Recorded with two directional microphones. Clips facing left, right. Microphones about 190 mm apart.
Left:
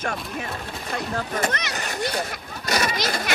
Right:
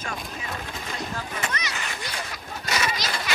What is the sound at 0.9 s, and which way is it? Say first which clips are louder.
Boat: left 7 dB; 55° left (ahead or behind).